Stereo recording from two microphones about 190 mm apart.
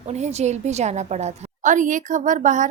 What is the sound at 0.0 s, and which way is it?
A woman's voice, 35° right (ahead or behind).